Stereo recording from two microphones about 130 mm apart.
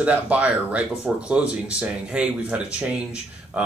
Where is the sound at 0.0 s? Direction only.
10° right (ahead or behind).